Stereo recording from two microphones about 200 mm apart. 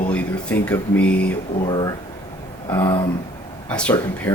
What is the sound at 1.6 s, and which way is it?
Speech, 20° left (ahead or behind).